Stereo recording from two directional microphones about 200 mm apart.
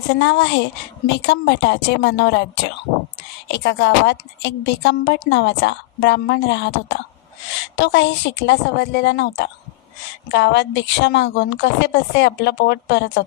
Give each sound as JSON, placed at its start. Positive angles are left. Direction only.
{"t": 0.1, "sound": "a woman's voice", "side_deg": 60}
{"t": 3.5, "sound": "a woman's voice", "side_deg": 60}